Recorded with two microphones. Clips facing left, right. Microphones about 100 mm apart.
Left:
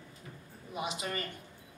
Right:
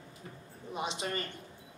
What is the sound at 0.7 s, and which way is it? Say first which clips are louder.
Speech: right 1 dB; 30° right (ahead or behind).